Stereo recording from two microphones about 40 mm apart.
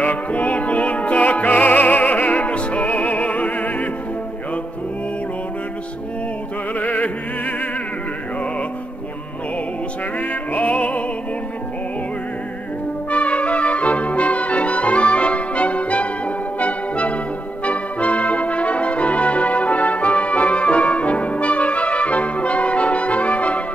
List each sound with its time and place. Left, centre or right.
0.0 s music: left
6.7 s opera: left
10.1 s music: left
13.1 s brass instrument: left